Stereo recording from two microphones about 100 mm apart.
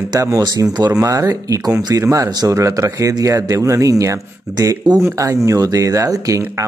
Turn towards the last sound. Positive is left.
turn(degrees=-35)  # may be behind; listen again after turning